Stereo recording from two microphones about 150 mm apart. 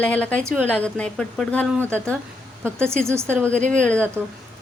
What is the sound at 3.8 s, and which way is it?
Speech, 10° left (ahead or behind).